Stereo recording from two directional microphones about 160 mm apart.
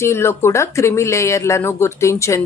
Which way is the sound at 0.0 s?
15° left (ahead or behind).